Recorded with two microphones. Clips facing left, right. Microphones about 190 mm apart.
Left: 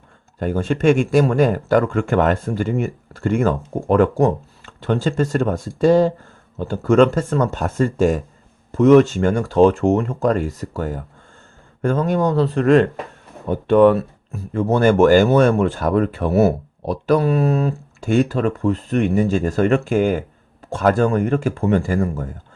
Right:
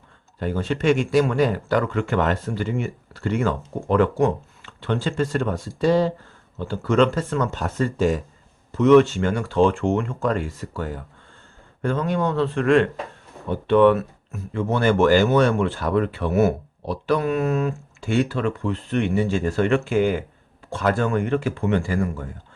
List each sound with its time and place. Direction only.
0.3 s speech: 45° left (ahead or behind)